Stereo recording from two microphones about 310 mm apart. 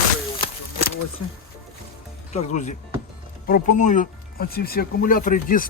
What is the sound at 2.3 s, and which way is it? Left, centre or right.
Speech, left.